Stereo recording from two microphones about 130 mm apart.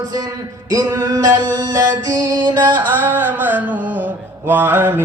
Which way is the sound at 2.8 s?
15° right (ahead or behind).